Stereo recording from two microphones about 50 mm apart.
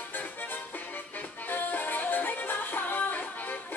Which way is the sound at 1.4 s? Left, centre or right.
Left.